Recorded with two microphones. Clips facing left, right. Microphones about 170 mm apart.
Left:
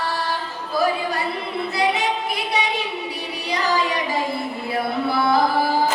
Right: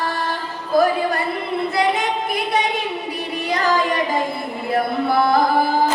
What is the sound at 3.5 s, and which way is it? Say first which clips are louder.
Music: right 2 dB; 50° right (ahead or behind).